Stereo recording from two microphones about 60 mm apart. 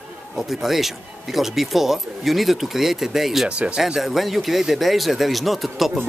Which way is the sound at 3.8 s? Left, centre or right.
Centre.